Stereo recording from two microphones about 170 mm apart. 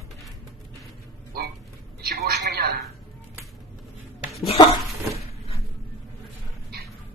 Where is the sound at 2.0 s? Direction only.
70° right (ahead or behind).